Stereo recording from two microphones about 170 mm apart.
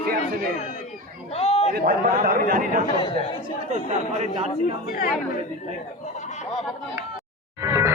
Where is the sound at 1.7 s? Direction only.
55° right (ahead or behind).